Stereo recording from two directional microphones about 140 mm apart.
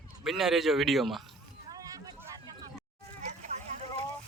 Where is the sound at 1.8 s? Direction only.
25° right (ahead or behind).